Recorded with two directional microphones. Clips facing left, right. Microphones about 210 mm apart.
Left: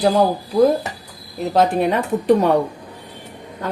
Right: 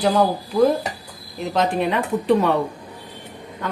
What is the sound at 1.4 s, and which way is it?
Speech, 40° left (ahead or behind).